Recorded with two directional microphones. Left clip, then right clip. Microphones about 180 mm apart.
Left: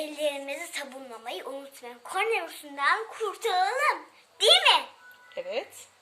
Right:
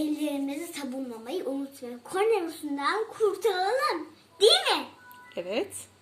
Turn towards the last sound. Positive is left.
turn(degrees=0)  # may be behind; listen again after turning